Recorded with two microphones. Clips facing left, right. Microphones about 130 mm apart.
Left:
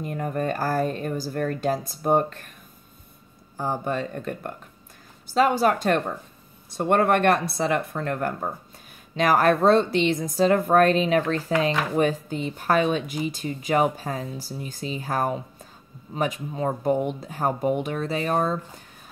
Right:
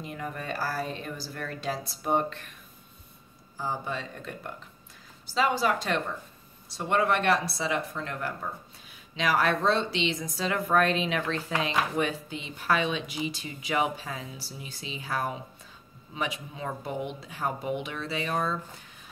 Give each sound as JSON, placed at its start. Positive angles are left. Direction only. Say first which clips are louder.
{"t": 0.0, "sound": "speech", "louder": "left 9 dB", "side_deg": 45}
{"t": 3.5, "sound": "speech", "louder": "left 6 dB", "side_deg": 50}